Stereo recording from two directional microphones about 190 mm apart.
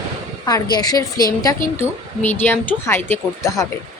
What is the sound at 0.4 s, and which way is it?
A woman's voice, 20° left (ahead or behind).